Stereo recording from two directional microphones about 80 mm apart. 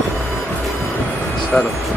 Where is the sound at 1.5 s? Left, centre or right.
Centre.